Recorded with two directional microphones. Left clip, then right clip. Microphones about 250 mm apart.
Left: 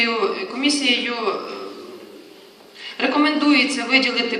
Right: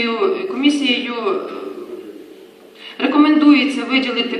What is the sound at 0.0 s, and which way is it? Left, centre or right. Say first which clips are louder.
A man's voice: right 2 dB; left.